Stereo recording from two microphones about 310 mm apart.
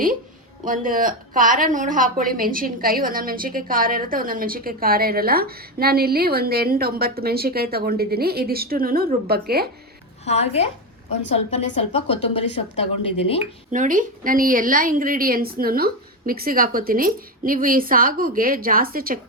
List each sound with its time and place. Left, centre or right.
0.6 s a woman's voice: right
10.2 s speech: centre
11.7 s speech: centre
13.7 s a woman's voice: right